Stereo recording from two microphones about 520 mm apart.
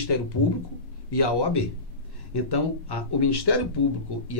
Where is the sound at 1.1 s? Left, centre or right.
Left.